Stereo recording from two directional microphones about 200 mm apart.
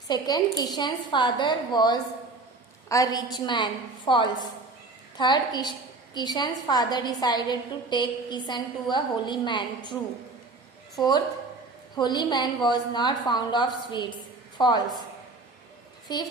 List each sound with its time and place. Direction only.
0.1 s a woman's voice: 20° left (ahead or behind)
11.9 s a woman's voice: 20° left (ahead or behind)
16.1 s a woman's voice: 20° left (ahead or behind)